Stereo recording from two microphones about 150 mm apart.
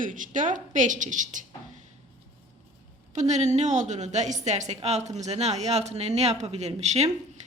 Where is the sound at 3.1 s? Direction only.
50° right (ahead or behind).